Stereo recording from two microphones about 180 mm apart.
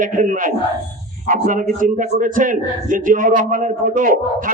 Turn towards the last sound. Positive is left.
turn(degrees=-50)  # may be behind; listen again after turning